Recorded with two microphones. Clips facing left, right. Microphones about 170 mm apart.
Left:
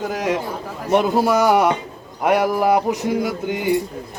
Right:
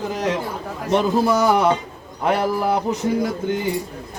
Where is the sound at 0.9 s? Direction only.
10° left (ahead or behind).